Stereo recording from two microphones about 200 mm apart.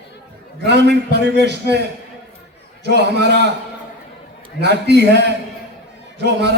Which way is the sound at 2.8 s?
55° right (ahead or behind).